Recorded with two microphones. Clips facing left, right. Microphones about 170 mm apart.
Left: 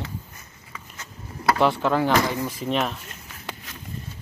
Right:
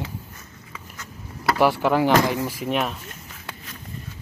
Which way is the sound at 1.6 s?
10° right (ahead or behind).